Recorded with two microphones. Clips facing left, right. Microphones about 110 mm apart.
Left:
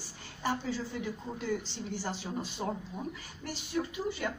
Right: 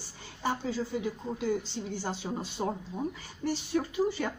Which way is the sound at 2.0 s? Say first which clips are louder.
Right 2 dB; 25° right (ahead or behind).